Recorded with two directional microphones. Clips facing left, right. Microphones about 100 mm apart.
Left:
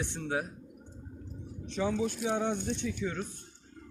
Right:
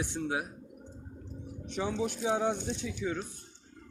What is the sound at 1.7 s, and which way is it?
Speech, 15° right (ahead or behind).